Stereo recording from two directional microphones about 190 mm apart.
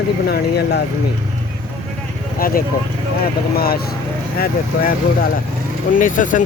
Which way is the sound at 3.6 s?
55° left (ahead or behind).